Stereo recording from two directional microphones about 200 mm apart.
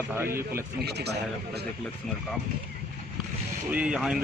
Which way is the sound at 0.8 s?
55° right (ahead or behind).